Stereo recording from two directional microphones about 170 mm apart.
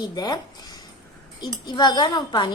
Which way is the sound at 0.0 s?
25° left (ahead or behind).